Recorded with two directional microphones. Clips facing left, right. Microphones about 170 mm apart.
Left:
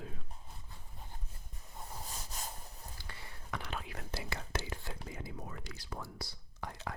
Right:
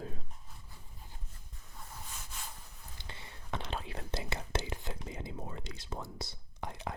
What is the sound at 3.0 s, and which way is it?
Whispering, 25° right (ahead or behind).